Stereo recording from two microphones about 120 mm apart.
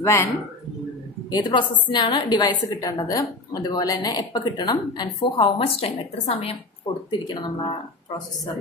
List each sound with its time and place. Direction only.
0.0 s speech: 25° left (ahead or behind)
1.3 s a woman's voice: 40° left (ahead or behind)
7.1 s a woman's voice: 40° left (ahead or behind)